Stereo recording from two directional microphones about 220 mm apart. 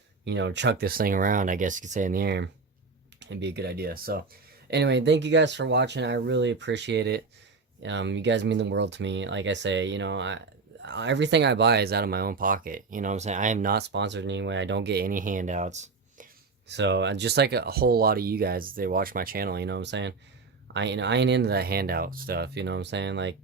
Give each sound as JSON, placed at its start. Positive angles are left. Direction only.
{"t": 0.3, "sound": "speech", "side_deg": -55}
{"t": 16.6, "sound": "speech", "side_deg": -55}